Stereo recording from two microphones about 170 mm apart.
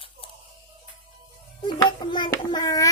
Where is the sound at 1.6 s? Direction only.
25° left (ahead or behind).